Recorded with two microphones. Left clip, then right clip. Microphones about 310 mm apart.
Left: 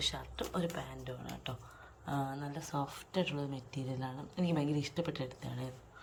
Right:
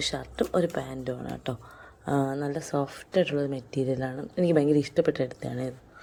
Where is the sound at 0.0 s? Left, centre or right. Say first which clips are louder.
Right 8 dB; centre.